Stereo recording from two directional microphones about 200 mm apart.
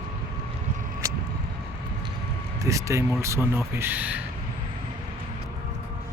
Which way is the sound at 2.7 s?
15° right (ahead or behind).